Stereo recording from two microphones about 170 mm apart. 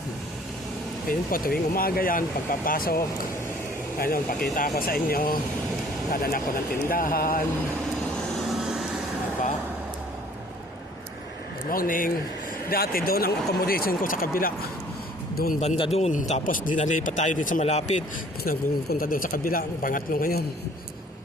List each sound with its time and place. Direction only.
1.0 s speech: 60° left (ahead or behind)
11.7 s speech: 55° left (ahead or behind)
15.8 s a man's voice: 40° left (ahead or behind)
18.4 s speech: 55° left (ahead or behind)